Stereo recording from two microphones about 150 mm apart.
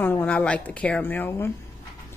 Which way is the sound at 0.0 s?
10° left (ahead or behind).